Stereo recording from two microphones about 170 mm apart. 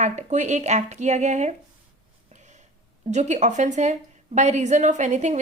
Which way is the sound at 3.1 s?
45° right (ahead or behind).